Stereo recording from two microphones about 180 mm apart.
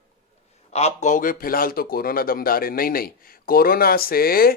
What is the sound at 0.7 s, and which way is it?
A man's voice, 40° left (ahead or behind).